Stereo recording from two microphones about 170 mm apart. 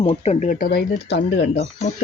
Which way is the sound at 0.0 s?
35° left (ahead or behind).